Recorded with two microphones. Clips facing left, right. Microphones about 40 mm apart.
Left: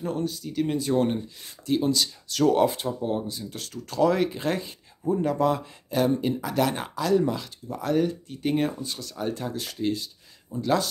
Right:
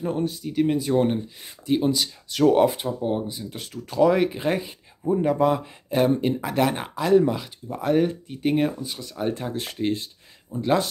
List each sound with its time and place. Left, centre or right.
0.0 s speech: right
7.2 s speech: centre
8.3 s speech: centre
9.0 s speech: right